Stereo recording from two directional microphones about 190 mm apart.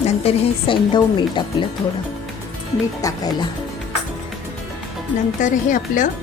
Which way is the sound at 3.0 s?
20° left (ahead or behind).